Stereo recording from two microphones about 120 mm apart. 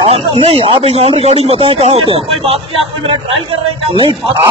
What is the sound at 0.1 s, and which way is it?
Speech, 60° right (ahead or behind).